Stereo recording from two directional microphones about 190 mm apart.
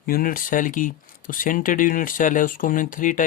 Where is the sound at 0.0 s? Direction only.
50° left (ahead or behind).